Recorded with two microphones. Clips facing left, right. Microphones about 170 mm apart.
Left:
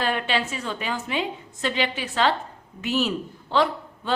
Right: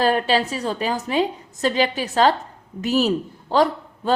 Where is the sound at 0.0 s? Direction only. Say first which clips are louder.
Right 6 dB; 35° right (ahead or behind).